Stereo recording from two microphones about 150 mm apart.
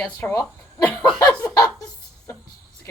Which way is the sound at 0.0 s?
20° left (ahead or behind).